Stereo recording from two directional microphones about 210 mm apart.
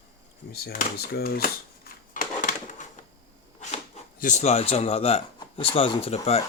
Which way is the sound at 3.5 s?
35° left (ahead or behind).